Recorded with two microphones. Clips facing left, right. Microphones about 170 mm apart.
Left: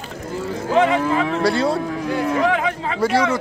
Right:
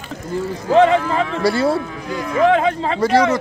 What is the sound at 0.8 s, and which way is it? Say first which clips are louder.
Speech: right 3 dB; 35° right (ahead or behind).